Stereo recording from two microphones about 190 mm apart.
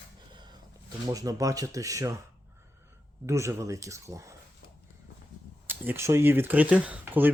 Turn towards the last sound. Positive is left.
turn(degrees=-10)  # may be behind; listen again after turning